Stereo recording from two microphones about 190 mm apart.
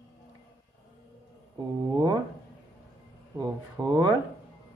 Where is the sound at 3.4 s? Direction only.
25° right (ahead or behind).